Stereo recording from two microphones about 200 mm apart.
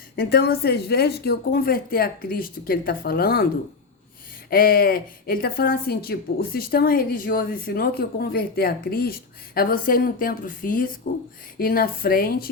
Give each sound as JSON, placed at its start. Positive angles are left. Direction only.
{"t": 0.2, "sound": "a woman's voice", "side_deg": 50}
{"t": 4.4, "sound": "a woman's voice", "side_deg": 50}